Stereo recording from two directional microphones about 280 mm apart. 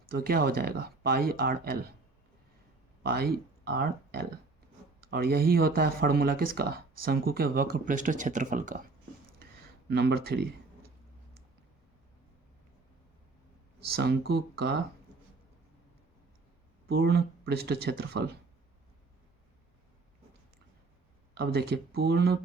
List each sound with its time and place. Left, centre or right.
0.1 s speech: right
3.0 s speech: right
9.4 s a sound: right
13.9 s speech: right
16.9 s speech: right
21.3 s speech: right